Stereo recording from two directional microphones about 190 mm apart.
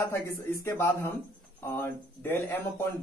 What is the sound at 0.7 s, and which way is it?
Speech, 10° left (ahead or behind).